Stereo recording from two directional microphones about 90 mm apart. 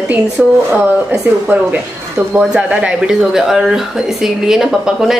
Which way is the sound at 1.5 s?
20° right (ahead or behind).